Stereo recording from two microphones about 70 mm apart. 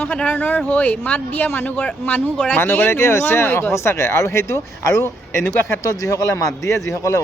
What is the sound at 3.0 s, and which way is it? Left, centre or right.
A man's voice, left.